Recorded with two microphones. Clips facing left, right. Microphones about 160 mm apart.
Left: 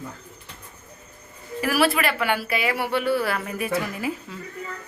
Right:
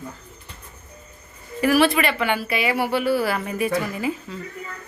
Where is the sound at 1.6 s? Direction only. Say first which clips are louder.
Right 4 dB; 5° left (ahead or behind).